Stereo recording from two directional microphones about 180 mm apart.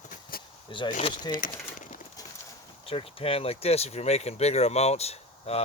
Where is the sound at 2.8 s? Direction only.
30° left (ahead or behind).